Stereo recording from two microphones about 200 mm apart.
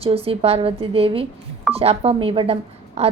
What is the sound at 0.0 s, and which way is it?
A woman's voice, 30° right (ahead or behind).